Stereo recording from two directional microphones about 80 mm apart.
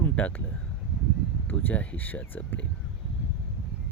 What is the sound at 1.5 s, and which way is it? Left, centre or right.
Speech, left.